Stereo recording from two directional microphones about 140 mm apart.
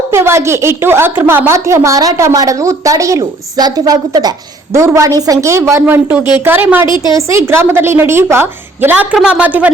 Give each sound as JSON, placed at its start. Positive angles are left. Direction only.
{"t": 0.1, "sound": "a woman's voice", "side_deg": -15}